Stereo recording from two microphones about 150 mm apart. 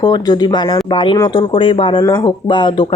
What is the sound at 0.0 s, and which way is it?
Speech, 25° left (ahead or behind).